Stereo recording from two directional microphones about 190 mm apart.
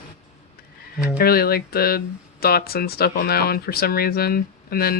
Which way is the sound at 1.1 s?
55° left (ahead or behind).